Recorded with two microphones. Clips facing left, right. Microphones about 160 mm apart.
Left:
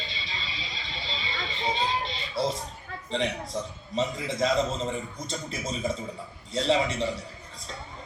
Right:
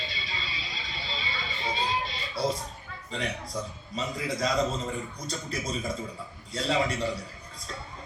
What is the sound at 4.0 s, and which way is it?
A man's voice, 25° left (ahead or behind).